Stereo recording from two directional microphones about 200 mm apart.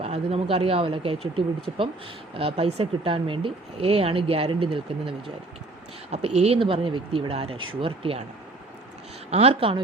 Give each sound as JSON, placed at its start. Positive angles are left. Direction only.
{"t": 0.0, "sound": "speech", "side_deg": -30}
{"t": 2.3, "sound": "speech", "side_deg": -30}
{"t": 9.3, "sound": "speech", "side_deg": -30}